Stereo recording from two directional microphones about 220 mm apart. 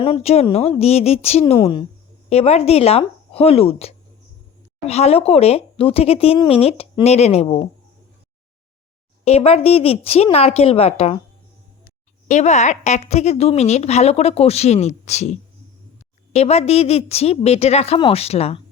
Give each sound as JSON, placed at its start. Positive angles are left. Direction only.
{"t": 0.0, "sound": "a woman's voice", "side_deg": 25}
{"t": 9.2, "sound": "a woman's voice", "side_deg": 30}
{"t": 12.3, "sound": "a woman's voice", "side_deg": 30}